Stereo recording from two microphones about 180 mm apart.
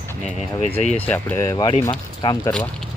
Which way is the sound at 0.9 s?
10° left (ahead or behind).